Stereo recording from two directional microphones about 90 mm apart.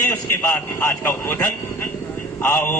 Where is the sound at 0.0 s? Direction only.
25° left (ahead or behind).